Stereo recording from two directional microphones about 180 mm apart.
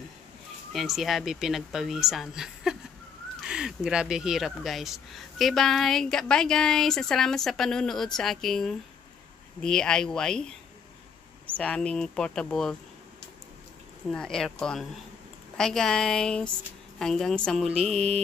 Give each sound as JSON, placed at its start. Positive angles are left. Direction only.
{"t": 0.7, "sound": "speech", "side_deg": 0}
{"t": 11.5, "sound": "speech", "side_deg": 5}
{"t": 14.1, "sound": "speech", "side_deg": 5}
{"t": 17.9, "sound": "mantra", "side_deg": -35}